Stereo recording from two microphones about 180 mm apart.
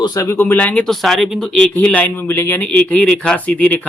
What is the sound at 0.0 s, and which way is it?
Speech, 20° left (ahead or behind).